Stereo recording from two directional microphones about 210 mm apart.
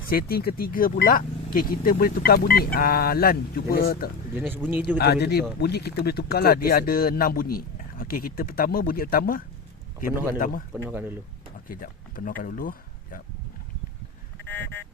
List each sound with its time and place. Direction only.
0.1 s speech: 45° left (ahead or behind)
4.4 s speech: 10° right (ahead or behind)
4.9 s a man's voice: 50° left (ahead or behind)
10.8 s speech: 10° right (ahead or behind)
11.7 s speech: 40° left (ahead or behind)
14.4 s a sound: 10° left (ahead or behind)